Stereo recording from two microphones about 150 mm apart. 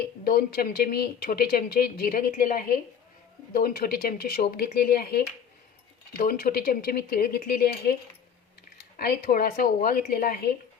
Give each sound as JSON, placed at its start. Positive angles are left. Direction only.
{"t": 0.3, "sound": "speech", "side_deg": 80}
{"t": 6.1, "sound": "speech", "side_deg": 75}
{"t": 9.0, "sound": "speech", "side_deg": 85}